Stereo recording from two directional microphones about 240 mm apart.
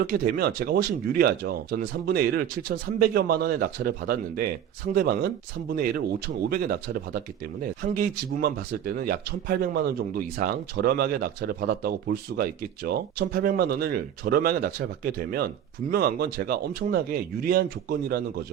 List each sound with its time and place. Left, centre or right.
0.0 s speech: right